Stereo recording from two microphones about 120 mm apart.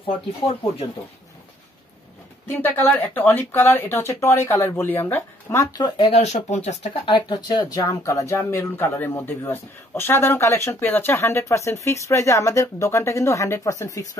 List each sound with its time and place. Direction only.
0.0 s speech: 50° left (ahead or behind)
2.4 s speech: 15° left (ahead or behind)
5.8 s speech: 35° left (ahead or behind)
6.1 s speech: 65° left (ahead or behind)
7.1 s speech: 45° left (ahead or behind)
7.4 s speech: 30° left (ahead or behind)